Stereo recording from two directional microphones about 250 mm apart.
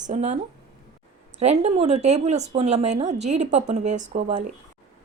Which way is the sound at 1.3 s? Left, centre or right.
Right.